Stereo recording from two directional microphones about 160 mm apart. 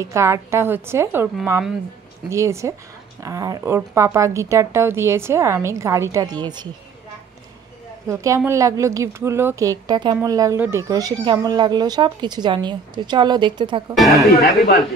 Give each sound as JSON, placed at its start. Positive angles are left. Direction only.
{"t": 0.0, "sound": "a woman's voice", "side_deg": -20}
{"t": 8.1, "sound": "speech", "side_deg": -20}
{"t": 13.9, "sound": "speech", "side_deg": 0}